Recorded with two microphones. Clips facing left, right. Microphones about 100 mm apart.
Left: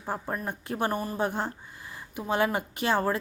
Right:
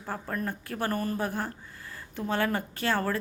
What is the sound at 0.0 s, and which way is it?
A woman's voice, 15° left (ahead or behind).